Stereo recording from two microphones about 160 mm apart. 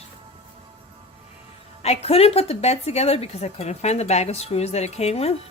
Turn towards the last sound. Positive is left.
turn(degrees=40)  # may be behind; listen again after turning